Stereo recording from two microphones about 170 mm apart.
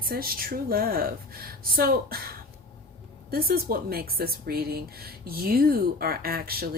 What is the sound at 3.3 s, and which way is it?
Speech, 60° right (ahead or behind).